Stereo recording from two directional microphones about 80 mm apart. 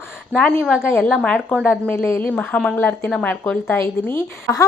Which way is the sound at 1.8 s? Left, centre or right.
Left.